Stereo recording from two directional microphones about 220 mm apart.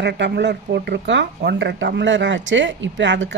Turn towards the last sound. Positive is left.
turn(degrees=-55)  # may be behind; listen again after turning